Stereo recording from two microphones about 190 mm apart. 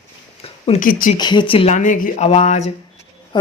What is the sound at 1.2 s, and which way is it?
Speech, 25° left (ahead or behind).